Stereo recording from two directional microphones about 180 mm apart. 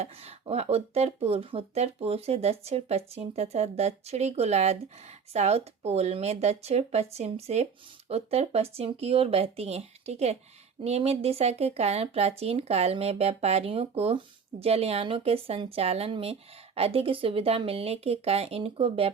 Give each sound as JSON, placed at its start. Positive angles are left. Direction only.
{"t": 0.0, "sound": "speech", "side_deg": -35}